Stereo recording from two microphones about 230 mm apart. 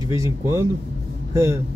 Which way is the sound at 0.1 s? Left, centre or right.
Centre.